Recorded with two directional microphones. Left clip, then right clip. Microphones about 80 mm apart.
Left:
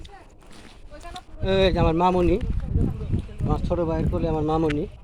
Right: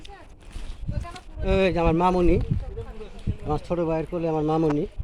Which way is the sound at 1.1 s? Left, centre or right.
Left.